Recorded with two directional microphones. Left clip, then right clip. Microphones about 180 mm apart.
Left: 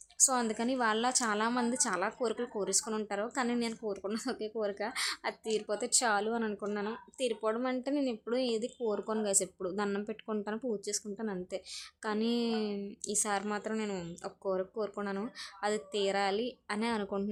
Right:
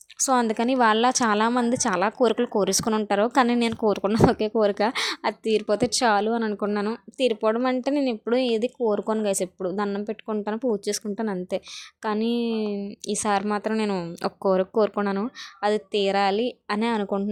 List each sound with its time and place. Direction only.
0.2 s a woman's voice: 35° right (ahead or behind)